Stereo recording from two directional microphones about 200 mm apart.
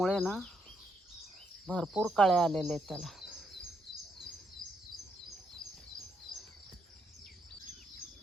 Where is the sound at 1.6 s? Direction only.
Centre (ahead or behind).